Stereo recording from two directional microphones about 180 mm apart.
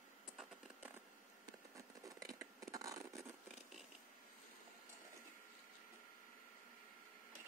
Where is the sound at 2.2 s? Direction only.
20° right (ahead or behind).